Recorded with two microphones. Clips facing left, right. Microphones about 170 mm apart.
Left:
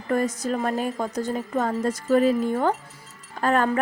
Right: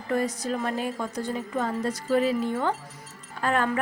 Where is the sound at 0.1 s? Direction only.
45° left (ahead or behind).